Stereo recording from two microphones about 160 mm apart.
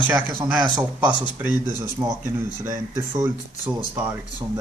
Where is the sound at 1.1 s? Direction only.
30° left (ahead or behind).